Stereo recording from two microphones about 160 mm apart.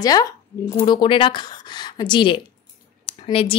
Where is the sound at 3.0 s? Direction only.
35° left (ahead or behind).